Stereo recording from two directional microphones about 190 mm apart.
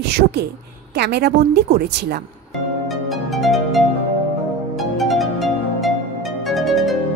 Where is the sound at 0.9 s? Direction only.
60° right (ahead or behind).